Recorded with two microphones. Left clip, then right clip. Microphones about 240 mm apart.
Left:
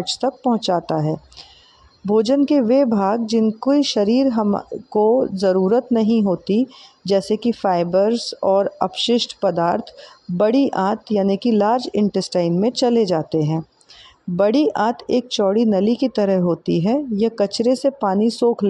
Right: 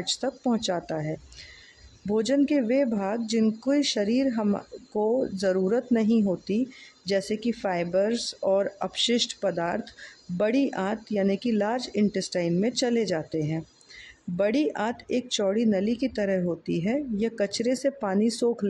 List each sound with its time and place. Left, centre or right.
0.2 s a woman's voice: centre
4.3 s a woman's voice: centre
5.2 s speech: centre
5.5 s a woman's voice: centre
18.4 s speech: centre